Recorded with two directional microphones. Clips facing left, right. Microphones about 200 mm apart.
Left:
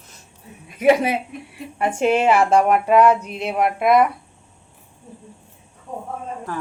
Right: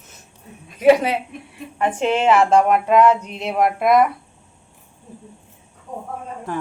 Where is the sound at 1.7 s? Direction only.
10° left (ahead or behind).